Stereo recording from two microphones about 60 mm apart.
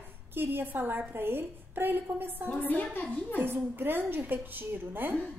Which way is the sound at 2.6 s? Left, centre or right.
Left.